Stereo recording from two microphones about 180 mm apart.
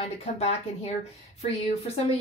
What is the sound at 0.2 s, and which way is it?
Speech, 35° left (ahead or behind).